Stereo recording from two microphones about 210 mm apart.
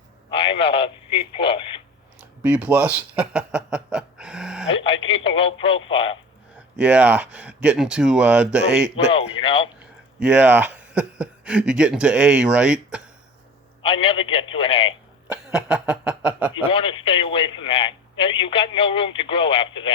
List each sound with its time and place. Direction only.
0.3 s a sound: 25° left (ahead or behind)
1.4 s speech: 25° left (ahead or behind)
2.4 s a sound: 5° right (ahead or behind)
5.0 s speech: 25° left (ahead or behind)
6.7 s speech: 5° right (ahead or behind)
9.0 s speech: 25° left (ahead or behind)
10.2 s speech: 5° right (ahead or behind)
13.8 s speech: 25° left (ahead or behind)
15.3 s speech: 5° right (ahead or behind)
16.6 s speech: 25° left (ahead or behind)